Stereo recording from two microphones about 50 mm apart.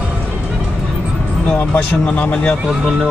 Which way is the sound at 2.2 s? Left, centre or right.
Left.